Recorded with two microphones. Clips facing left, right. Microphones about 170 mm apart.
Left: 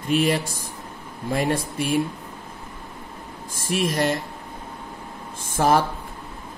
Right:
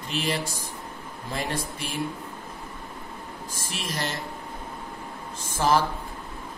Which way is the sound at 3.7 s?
55° left (ahead or behind).